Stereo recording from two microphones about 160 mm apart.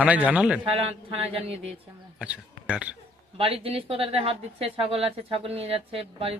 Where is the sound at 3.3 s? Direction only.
35° right (ahead or behind).